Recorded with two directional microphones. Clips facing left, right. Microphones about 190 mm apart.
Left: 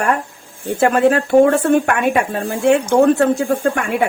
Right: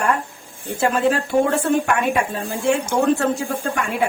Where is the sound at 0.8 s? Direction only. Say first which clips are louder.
Left 5 dB; 60° left (ahead or behind).